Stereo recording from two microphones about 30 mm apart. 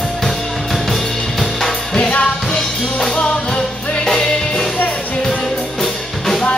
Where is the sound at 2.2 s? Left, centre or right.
Left.